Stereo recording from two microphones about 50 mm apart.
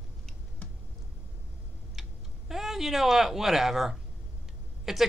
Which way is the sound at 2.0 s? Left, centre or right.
Centre.